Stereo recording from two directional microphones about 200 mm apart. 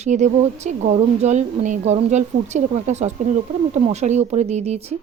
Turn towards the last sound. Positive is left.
turn(degrees=-30)  # may be behind; listen again after turning